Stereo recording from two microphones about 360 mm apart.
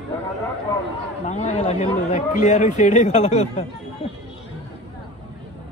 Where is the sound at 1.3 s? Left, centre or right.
Centre.